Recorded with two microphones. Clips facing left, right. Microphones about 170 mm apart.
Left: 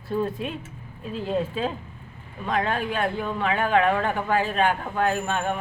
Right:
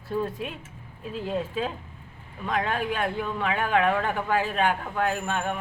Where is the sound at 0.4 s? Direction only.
10° right (ahead or behind).